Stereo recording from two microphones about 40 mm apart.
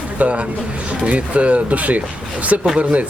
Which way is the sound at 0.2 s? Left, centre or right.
Right.